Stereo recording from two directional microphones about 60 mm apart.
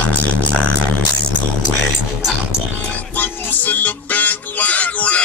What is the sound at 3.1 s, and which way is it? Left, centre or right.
Music, left.